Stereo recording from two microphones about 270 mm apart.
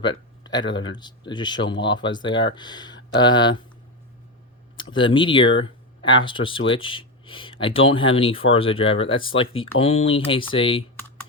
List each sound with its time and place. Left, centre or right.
0.0 s a sound: centre
0.7 s speech: centre
4.8 s speech: centre